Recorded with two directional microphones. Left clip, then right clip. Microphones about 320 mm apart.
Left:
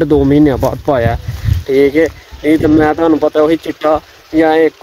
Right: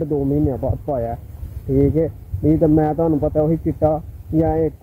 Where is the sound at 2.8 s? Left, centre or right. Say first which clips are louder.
Left 8 dB; centre.